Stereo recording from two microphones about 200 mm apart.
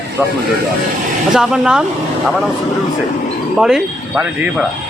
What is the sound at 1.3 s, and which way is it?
Speech, 5° right (ahead or behind).